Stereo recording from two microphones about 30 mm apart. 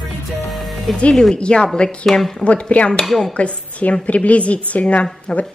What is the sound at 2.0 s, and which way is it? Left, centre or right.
Speech, centre.